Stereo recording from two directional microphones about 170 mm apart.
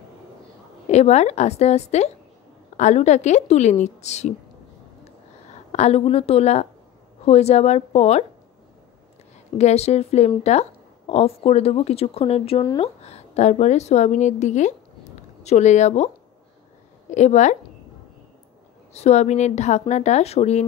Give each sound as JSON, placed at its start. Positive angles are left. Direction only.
{"t": 0.8, "sound": "a woman's voice", "side_deg": 40}
{"t": 5.7, "sound": "a woman's voice", "side_deg": 40}
{"t": 9.6, "sound": "a woman's voice", "side_deg": 40}
{"t": 17.1, "sound": "a woman's voice", "side_deg": 45}
{"t": 18.9, "sound": "a woman's voice", "side_deg": 40}